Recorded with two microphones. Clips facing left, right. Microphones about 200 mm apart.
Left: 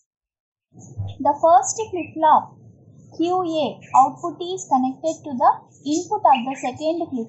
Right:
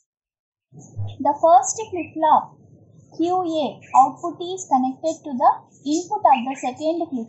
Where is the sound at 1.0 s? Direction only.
10° right (ahead or behind).